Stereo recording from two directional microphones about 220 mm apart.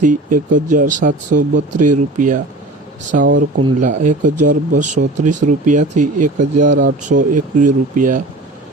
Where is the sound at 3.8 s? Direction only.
35° right (ahead or behind).